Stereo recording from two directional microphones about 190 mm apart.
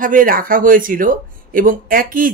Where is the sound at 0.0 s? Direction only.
45° right (ahead or behind).